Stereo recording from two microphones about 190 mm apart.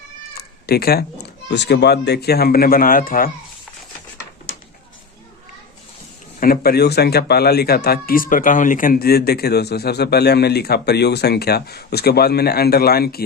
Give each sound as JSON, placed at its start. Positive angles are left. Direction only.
{"t": 0.3, "sound": "cat", "side_deg": 55}
{"t": 1.5, "sound": "speech", "side_deg": 65}
{"t": 6.4, "sound": "speech", "side_deg": 50}